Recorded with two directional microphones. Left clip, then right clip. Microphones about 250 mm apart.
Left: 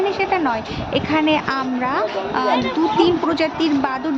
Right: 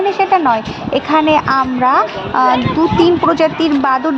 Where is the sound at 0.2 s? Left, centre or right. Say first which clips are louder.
Right 7 dB; centre.